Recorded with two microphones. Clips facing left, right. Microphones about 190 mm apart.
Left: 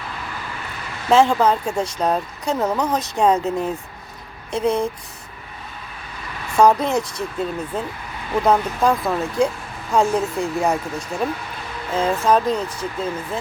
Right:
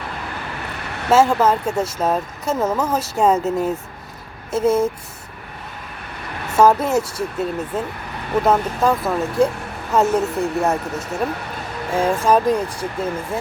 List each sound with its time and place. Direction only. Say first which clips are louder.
1.1 s speech: even; 5° right (ahead or behind)
6.6 s speech: right 1 dB; 5° right (ahead or behind)